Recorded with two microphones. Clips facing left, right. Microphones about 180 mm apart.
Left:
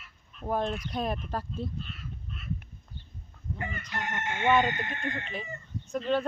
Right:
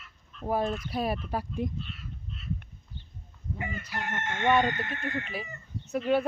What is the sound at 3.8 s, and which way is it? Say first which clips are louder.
Chicken: left 2 dB; 5° right (ahead or behind).